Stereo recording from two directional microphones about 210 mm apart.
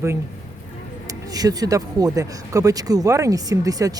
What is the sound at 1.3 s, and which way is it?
Speech, 15° right (ahead or behind).